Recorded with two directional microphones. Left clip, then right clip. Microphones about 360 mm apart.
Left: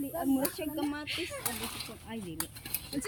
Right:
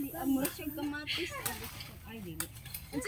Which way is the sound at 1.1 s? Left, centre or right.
Left.